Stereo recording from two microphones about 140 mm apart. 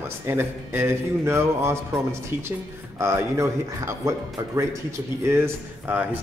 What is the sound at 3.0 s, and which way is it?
A man's voice, 20° right (ahead or behind).